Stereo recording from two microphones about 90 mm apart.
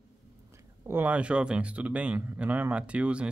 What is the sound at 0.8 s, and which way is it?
Speech, 20° right (ahead or behind).